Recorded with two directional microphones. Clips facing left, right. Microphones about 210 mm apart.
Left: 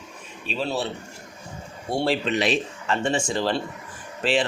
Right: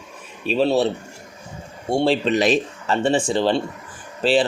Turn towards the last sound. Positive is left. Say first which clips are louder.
# right 5 dB
turn(degrees=-35)  # may be behind; listen again after turning